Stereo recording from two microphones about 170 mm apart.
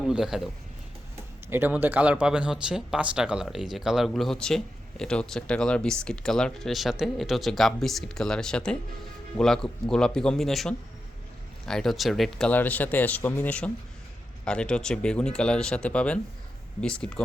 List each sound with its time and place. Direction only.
0.0 s speech: 5° right (ahead or behind)
1.5 s speech: 10° right (ahead or behind); by 17.2 s 5° left (ahead or behind)